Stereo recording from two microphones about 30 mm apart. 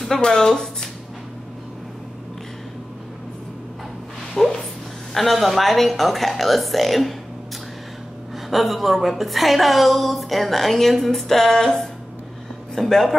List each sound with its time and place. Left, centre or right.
0.2 s speech: left
4.4 s a sound: centre
5.1 s a woman's voice: centre
8.5 s a woman's voice: centre
12.8 s a woman's voice: centre